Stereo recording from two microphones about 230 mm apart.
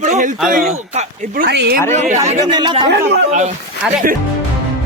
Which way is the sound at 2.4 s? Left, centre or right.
Centre.